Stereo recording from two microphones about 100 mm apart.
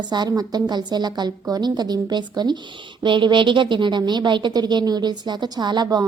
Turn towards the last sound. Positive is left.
turn(degrees=-45)  # may be behind; listen again after turning